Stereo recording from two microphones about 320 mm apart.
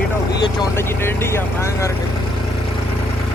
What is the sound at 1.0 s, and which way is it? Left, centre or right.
Speech, centre.